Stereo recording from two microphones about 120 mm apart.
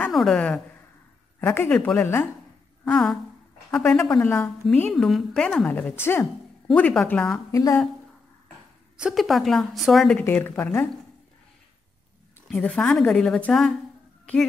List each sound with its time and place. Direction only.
0.1 s a woman's voice: centre (ahead or behind)
1.4 s speech: 20° left (ahead or behind)
1.7 s a woman's voice: 10° left (ahead or behind)
4.2 s speech: 20° left (ahead or behind)
4.9 s a woman's voice: centre (ahead or behind); by 6.2 s 20° left (ahead or behind)
6.7 s a woman's voice: 5° left (ahead or behind)
7.5 s speech: 25° left (ahead or behind)
8.9 s a woman's voice: 5° right (ahead or behind)
10.1 s a woman's voice: 15° left (ahead or behind)
12.4 s a woman's voice: 5° left (ahead or behind)